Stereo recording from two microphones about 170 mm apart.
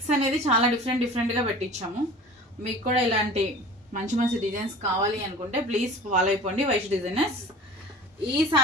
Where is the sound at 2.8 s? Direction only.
40° right (ahead or behind).